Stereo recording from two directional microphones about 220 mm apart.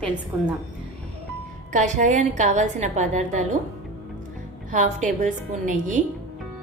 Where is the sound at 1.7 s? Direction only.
35° right (ahead or behind).